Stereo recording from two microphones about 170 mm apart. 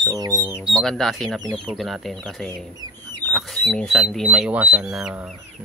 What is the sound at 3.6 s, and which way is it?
Speech, 5° left (ahead or behind).